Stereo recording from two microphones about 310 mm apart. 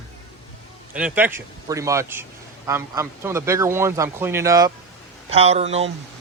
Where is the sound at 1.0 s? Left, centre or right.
Centre.